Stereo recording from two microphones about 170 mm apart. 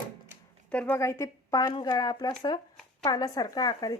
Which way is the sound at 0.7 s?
5° left (ahead or behind).